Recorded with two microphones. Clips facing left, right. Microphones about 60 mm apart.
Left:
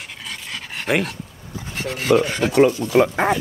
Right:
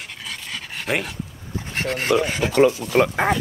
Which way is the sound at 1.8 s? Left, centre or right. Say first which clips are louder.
Left 1 dB; right.